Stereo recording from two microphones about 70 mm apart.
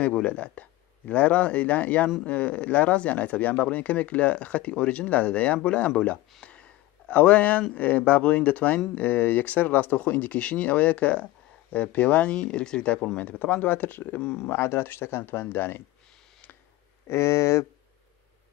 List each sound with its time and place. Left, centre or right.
0.0 s speech: centre
6.4 s a sound: centre
7.7 s speech: left
14.2 s speech: centre
14.5 s speech: left
17.1 s speech: left